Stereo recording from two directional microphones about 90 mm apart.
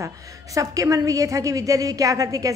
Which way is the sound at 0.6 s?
40° right (ahead or behind).